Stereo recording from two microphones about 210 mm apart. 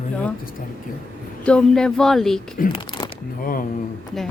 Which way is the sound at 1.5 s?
5° left (ahead or behind).